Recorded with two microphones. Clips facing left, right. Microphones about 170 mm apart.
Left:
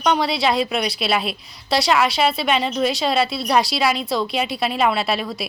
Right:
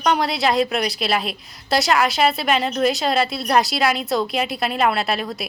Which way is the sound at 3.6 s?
45° right (ahead or behind).